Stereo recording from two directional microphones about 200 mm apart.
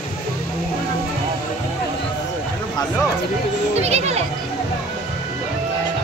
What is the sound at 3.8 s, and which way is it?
Speech, 30° right (ahead or behind).